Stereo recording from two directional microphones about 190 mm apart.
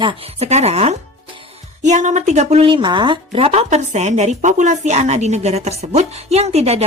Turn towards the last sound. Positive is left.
turn(degrees=-35)  # may be behind; listen again after turning